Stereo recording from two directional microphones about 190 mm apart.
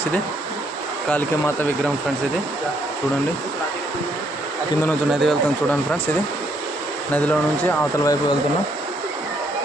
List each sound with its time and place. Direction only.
1.1 s speech: 10° left (ahead or behind)
4.9 s speech: 5° left (ahead or behind)
7.1 s speech: 10° left (ahead or behind)
8.0 s speech: 20° left (ahead or behind)